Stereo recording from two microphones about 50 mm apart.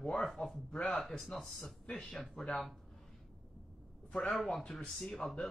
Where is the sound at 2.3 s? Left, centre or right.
Centre.